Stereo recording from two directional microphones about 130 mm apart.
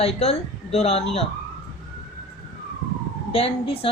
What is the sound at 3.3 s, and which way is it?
Speech, 50° left (ahead or behind).